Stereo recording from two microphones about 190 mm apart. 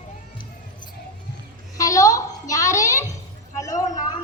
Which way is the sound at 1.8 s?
15° left (ahead or behind).